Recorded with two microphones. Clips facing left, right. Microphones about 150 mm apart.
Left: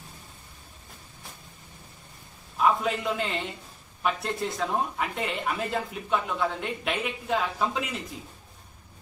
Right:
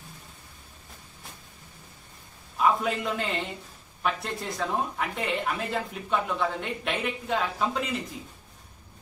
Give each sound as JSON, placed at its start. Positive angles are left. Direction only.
{"t": 2.5, "sound": "a man's voice", "side_deg": 0}